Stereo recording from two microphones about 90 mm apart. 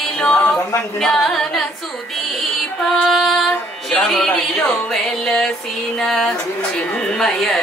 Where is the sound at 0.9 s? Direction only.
5° left (ahead or behind).